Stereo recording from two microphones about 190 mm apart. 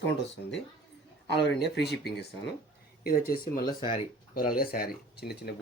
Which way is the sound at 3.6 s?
25° left (ahead or behind).